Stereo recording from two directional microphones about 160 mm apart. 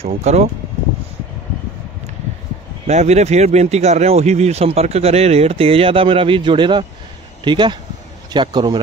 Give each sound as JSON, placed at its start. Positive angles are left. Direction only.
{"t": 0.0, "sound": "speech", "side_deg": -40}
{"t": 2.9, "sound": "a man's voice", "side_deg": -45}